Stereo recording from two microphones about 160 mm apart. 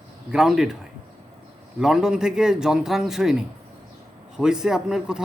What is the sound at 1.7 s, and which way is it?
Speech, 5° right (ahead or behind).